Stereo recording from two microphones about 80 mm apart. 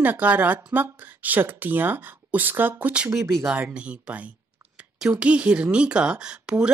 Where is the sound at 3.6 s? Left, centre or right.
Centre.